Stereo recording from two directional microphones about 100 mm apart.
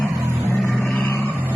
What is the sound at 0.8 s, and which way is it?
Vehicle, 20° left (ahead or behind).